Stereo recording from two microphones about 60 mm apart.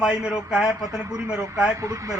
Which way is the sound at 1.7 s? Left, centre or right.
Right.